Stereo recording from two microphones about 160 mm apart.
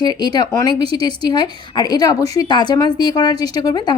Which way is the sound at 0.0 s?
25° left (ahead or behind).